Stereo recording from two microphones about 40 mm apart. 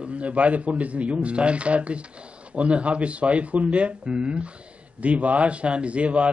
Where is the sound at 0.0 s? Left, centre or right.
Right.